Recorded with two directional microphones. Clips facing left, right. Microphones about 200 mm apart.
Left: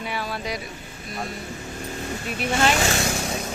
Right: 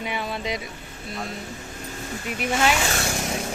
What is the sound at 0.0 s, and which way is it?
Speech, 20° right (ahead or behind).